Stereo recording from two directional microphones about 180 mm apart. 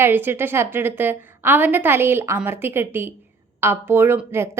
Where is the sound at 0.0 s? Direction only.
10° right (ahead or behind).